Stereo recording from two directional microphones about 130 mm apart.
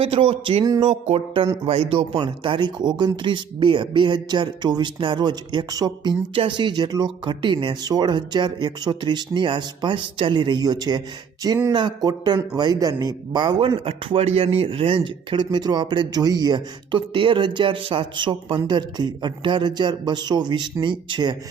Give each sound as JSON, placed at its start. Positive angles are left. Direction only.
{"t": 0.0, "sound": "speech", "side_deg": -45}
{"t": 0.6, "sound": "speech", "side_deg": -30}
{"t": 0.9, "sound": "a sound", "side_deg": -60}
{"t": 1.6, "sound": "speech", "side_deg": -45}